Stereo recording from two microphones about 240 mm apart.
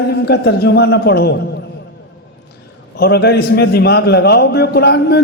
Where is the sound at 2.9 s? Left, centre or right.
Left.